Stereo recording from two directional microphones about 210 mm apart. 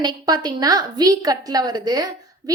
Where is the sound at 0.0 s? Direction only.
20° right (ahead or behind).